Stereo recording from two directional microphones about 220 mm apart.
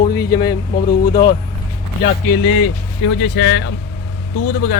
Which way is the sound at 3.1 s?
55° left (ahead or behind).